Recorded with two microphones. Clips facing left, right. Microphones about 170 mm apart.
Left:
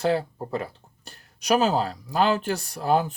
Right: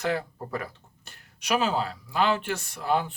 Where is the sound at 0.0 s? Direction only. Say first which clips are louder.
Left 5 dB; 30° left (ahead or behind).